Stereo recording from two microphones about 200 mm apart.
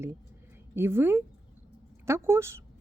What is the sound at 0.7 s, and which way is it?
A woman's voice, 10° right (ahead or behind).